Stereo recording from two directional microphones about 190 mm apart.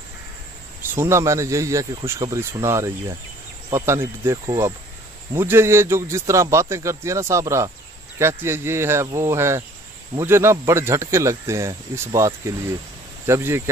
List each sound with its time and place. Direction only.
0.9 s speech: 15° right (ahead or behind)